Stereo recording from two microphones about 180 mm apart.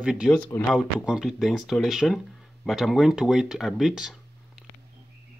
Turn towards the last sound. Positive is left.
turn(degrees=-5)  # may be behind; listen again after turning